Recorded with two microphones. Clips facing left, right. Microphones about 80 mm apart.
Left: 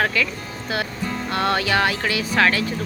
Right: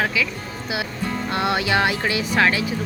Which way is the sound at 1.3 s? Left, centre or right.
Centre.